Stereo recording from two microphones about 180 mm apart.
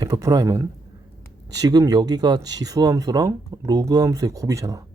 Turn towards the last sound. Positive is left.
turn(degrees=-20)  # may be behind; listen again after turning